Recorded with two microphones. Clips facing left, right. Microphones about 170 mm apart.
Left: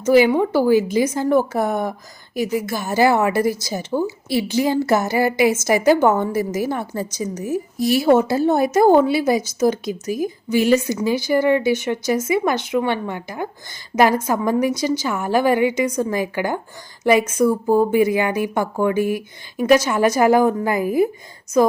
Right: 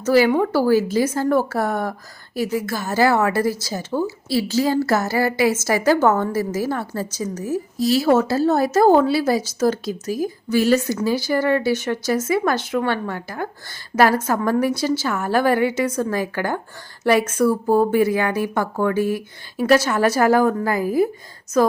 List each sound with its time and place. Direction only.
0.1 s a woman's voice: 15° left (ahead or behind)